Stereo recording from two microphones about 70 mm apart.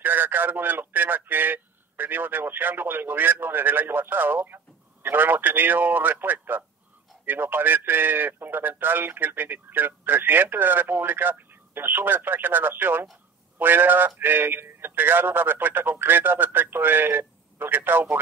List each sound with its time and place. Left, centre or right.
0.0 s a man's voice: right